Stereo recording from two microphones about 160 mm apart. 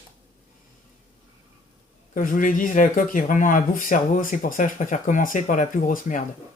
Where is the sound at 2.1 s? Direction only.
60° left (ahead or behind).